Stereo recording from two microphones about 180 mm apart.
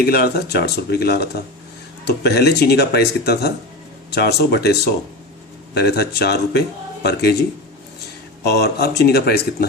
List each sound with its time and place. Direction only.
0.0 s speech: 60° left (ahead or behind)
8.4 s speech: 65° left (ahead or behind)